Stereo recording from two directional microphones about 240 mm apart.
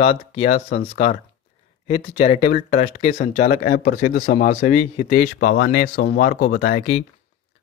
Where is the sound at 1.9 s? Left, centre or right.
Left.